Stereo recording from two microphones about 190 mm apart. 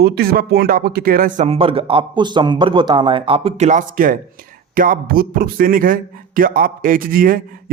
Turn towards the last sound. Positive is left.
turn(degrees=-50)  # may be behind; listen again after turning